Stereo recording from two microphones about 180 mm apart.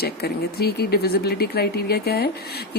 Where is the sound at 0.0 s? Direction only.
65° left (ahead or behind).